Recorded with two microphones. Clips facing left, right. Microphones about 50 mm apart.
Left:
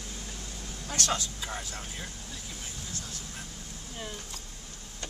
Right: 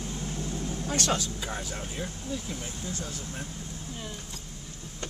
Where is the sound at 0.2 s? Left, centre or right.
Right.